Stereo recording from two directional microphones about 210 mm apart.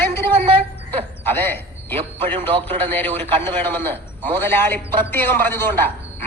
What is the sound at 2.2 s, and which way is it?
Speech, 25° right (ahead or behind).